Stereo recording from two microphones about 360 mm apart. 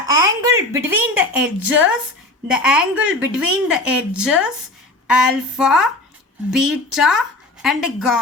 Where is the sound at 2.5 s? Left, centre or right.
Centre.